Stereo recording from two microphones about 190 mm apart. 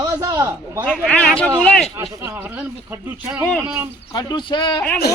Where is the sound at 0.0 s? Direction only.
20° right (ahead or behind).